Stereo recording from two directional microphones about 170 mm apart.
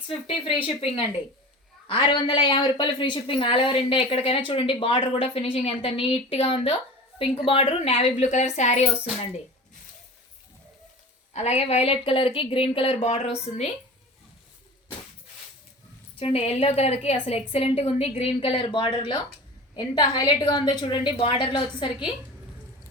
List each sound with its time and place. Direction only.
0.3 s speech: 35° left (ahead or behind)
11.3 s speech: 40° left (ahead or behind)
16.1 s a woman's voice: 35° left (ahead or behind)